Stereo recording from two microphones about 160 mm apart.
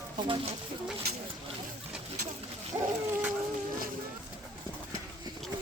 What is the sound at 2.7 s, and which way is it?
Dog, 25° right (ahead or behind).